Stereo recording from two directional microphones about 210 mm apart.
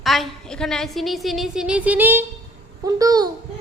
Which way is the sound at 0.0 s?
Centre (ahead or behind).